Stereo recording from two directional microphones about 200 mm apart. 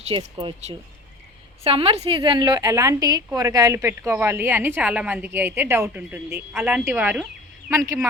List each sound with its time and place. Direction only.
0.1 s a woman's voice: 25° right (ahead or behind)